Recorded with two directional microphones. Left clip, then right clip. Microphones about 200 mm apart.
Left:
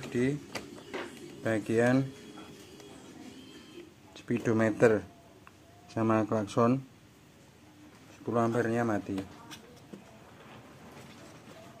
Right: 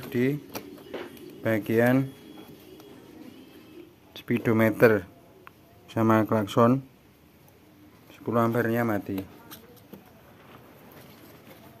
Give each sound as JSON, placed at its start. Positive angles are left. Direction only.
{"t": 0.1, "sound": "speech", "side_deg": -35}
{"t": 1.4, "sound": "speech", "side_deg": -35}
{"t": 4.3, "sound": "speech", "side_deg": -35}
{"t": 8.3, "sound": "speech", "side_deg": -35}